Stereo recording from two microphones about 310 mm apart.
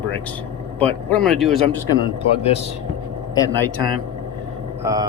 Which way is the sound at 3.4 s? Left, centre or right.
Centre.